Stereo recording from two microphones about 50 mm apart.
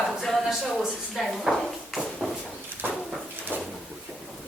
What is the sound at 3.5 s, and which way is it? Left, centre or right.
Sliding door, right.